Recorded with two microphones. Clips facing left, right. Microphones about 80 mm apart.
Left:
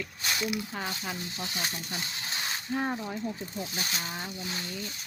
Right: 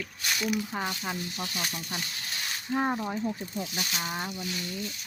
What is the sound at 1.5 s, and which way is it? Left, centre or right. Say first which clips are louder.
Speech: even; left.